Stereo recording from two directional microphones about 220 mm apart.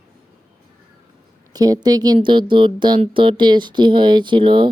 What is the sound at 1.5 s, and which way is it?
Speech, 15° right (ahead or behind).